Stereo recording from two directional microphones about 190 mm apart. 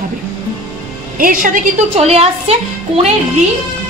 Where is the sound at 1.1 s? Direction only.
45° right (ahead or behind).